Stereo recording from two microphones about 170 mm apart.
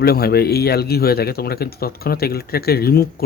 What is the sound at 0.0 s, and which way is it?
Speech, 65° left (ahead or behind).